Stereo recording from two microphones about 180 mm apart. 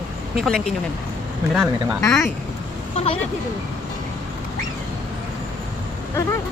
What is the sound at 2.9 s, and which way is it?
Speech, 30° left (ahead or behind).